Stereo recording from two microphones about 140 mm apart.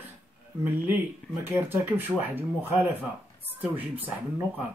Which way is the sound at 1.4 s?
15° right (ahead or behind).